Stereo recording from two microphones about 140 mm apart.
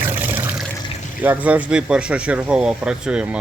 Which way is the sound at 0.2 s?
15° right (ahead or behind).